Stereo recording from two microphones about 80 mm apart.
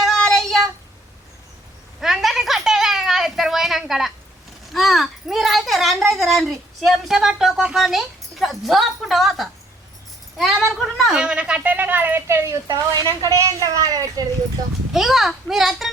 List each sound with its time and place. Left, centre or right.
0.2 s child singing: centre
2.0 s a sound: centre
4.7 s a child's voice: centre
11.1 s speech: centre; by 12.5 s right
12.6 s a woman's voice: right
13.2 s a child's voice: right
14.9 s a child's voice: centre